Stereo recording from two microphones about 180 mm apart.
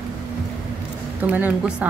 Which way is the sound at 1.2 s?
10° right (ahead or behind).